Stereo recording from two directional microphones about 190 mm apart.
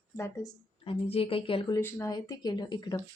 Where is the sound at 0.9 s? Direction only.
30° left (ahead or behind).